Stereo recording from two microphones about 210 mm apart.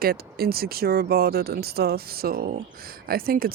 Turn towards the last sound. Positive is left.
turn(degrees=-45)  # may be behind; listen again after turning